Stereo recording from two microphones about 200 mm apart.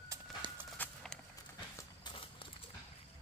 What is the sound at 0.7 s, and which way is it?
Walk, 5° left (ahead or behind).